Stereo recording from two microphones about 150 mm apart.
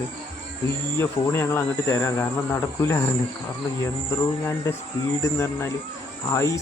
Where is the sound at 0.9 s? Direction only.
15° left (ahead or behind).